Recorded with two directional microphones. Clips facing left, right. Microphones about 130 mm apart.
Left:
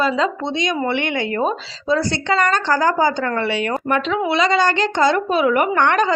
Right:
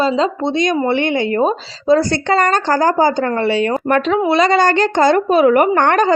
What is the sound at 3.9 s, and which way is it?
A woman's voice, 45° right (ahead or behind).